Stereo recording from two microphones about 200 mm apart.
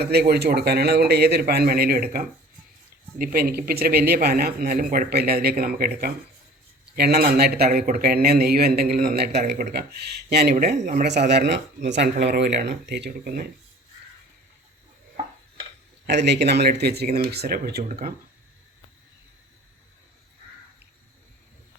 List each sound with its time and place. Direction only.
0.0 s a man's voice: 55° right (ahead or behind)
3.3 s a man's voice: 50° right (ahead or behind)
10.5 s a man's voice: 45° right (ahead or behind)
16.0 s a man's voice: 60° right (ahead or behind)